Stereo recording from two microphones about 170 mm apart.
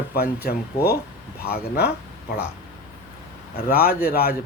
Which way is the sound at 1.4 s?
65° left (ahead or behind).